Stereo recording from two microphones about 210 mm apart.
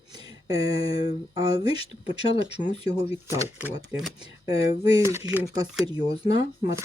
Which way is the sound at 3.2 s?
15° right (ahead or behind).